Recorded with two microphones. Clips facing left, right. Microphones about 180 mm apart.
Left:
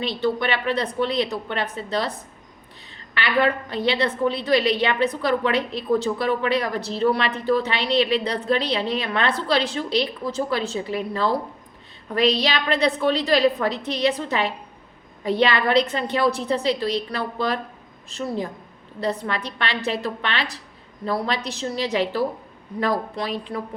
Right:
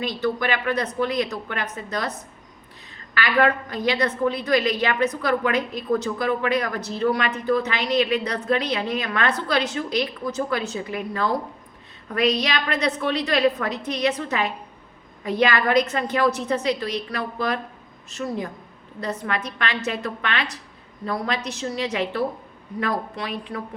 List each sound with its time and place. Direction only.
0.0 s a woman's voice: 25° left (ahead or behind)
3.2 s a woman's voice: 30° left (ahead or behind)
18.9 s a woman's voice: 30° left (ahead or behind)